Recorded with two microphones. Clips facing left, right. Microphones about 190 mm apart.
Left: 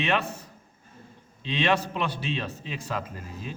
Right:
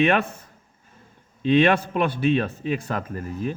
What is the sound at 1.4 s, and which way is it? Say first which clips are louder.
Speech: right 8 dB; 55° right (ahead or behind).